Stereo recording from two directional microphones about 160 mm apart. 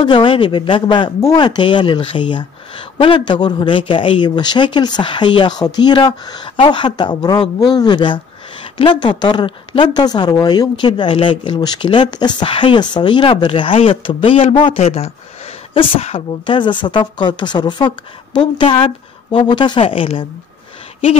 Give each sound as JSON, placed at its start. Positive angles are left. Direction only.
{"t": 0.0, "sound": "speech", "side_deg": 30}